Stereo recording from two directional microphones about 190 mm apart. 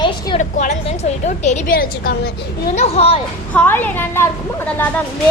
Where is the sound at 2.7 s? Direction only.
35° left (ahead or behind).